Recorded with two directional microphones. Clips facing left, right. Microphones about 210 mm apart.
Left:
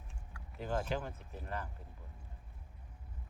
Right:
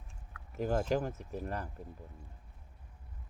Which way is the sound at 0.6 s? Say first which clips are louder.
Right 6 dB; 45° right (ahead or behind).